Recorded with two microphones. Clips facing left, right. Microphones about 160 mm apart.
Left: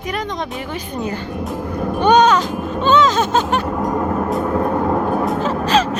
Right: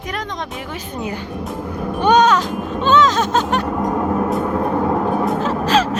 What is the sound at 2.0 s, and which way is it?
Music, centre (ahead or behind).